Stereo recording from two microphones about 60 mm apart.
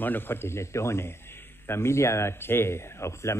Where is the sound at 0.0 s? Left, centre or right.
Left.